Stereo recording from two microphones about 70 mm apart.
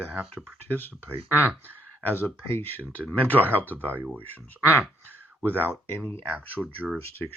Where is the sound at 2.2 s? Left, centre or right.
Left.